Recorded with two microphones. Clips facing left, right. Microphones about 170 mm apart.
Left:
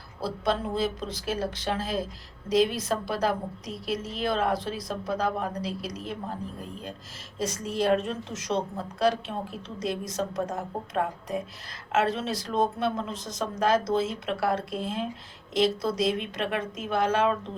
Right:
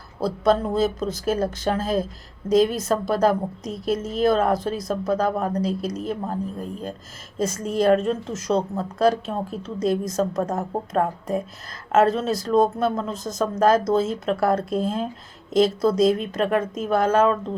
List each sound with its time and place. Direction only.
0.2 s a woman's voice: 45° right (ahead or behind)